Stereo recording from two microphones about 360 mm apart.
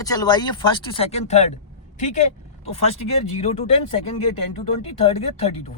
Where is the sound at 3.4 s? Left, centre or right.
Centre.